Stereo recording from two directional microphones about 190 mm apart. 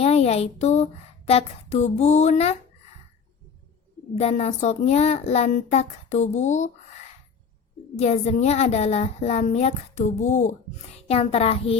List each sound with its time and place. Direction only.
0.0 s a woman's voice: 35° left (ahead or behind)
4.1 s a woman's voice: 35° left (ahead or behind)
7.9 s a woman's voice: 35° left (ahead or behind)